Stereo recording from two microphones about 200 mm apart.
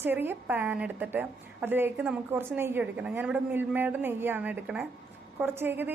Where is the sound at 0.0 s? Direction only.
10° right (ahead or behind).